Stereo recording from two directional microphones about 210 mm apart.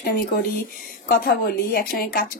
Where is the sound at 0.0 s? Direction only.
45° left (ahead or behind).